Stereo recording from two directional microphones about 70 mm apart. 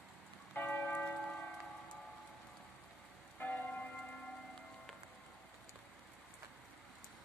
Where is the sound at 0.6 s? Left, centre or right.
Left.